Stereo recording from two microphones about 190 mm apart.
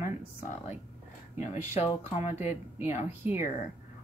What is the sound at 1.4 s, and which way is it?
Speech, 35° left (ahead or behind).